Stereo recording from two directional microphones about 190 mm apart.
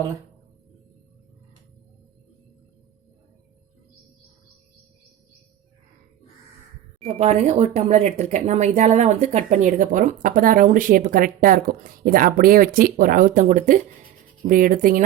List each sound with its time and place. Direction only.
7.0 s speech: 35° right (ahead or behind)